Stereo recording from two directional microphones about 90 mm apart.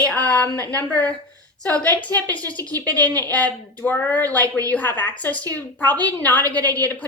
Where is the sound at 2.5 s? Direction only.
45° right (ahead or behind).